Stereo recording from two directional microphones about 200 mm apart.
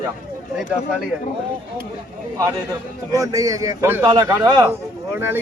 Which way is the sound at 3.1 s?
15° right (ahead or behind).